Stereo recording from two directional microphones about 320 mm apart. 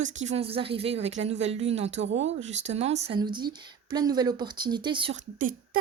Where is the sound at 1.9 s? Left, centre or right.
Right.